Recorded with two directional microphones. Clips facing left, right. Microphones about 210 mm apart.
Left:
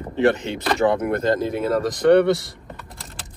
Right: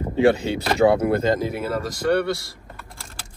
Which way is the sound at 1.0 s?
30° right (ahead or behind).